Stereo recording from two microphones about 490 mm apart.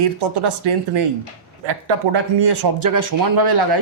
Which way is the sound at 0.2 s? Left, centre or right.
Right.